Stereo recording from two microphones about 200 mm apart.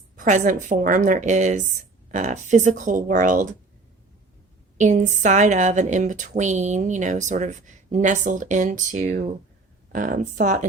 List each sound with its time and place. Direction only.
0.2 s a woman's voice: 40° right (ahead or behind)
4.8 s a woman's voice: 35° right (ahead or behind)